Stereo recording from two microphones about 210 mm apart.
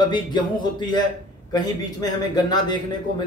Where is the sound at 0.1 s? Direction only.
20° left (ahead or behind).